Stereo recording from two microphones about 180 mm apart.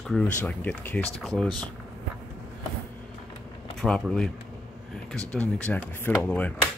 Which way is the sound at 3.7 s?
5° left (ahead or behind).